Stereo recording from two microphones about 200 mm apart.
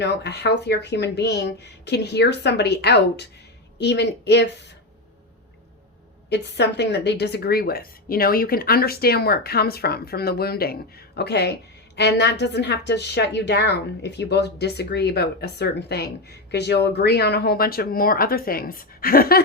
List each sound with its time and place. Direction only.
0.0 s a woman's voice: 60° left (ahead or behind)
6.3 s a woman's voice: 55° left (ahead or behind)